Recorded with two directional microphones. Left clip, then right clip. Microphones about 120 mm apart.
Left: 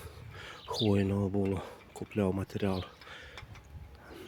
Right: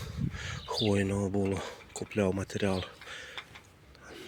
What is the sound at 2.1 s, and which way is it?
Speech, 30° left (ahead or behind).